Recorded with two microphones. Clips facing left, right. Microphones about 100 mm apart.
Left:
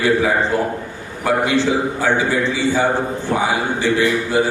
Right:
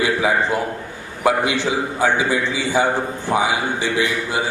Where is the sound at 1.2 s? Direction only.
15° right (ahead or behind).